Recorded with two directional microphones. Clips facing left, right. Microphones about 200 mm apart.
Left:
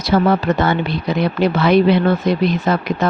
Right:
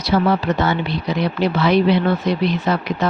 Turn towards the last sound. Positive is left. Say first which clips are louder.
# left 2 dB
turn(degrees=50)  # may be behind; listen again after turning